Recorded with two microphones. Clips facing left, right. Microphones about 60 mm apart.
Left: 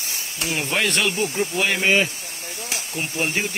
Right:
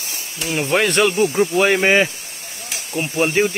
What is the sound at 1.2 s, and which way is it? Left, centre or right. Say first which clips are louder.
Speech: right 7 dB; right.